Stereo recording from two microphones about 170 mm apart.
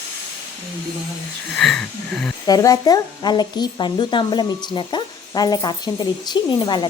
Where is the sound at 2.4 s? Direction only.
20° left (ahead or behind).